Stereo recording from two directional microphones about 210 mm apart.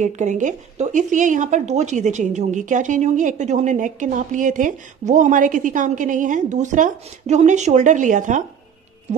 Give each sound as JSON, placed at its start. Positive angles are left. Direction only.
{"t": 0.0, "sound": "speech", "side_deg": -35}